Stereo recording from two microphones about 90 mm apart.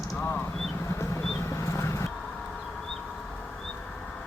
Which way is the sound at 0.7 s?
30° left (ahead or behind).